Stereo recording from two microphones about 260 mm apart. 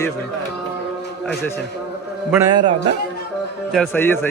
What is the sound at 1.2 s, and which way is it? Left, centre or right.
Speech, centre.